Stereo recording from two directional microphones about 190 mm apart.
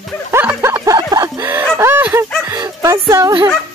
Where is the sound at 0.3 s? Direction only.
10° right (ahead or behind).